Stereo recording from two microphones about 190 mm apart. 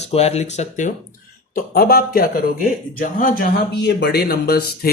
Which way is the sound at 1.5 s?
50° left (ahead or behind).